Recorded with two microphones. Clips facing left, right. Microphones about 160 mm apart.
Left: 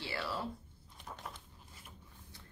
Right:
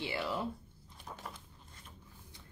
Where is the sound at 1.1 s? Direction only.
Centre (ahead or behind).